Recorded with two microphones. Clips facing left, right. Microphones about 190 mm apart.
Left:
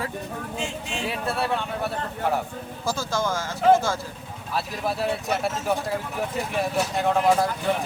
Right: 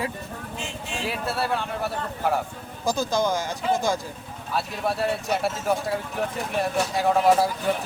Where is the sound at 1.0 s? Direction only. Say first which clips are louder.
Even; centre (ahead or behind).